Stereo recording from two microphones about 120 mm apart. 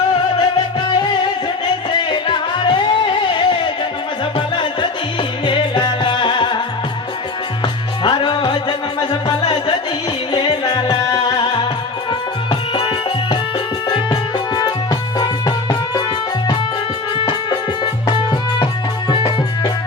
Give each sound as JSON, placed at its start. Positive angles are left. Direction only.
{"t": 0.9, "sound": "music", "side_deg": 40}
{"t": 8.0, "sound": "music", "side_deg": 40}
{"t": 13.9, "sound": "music", "side_deg": 40}
{"t": 17.2, "sound": "music", "side_deg": 40}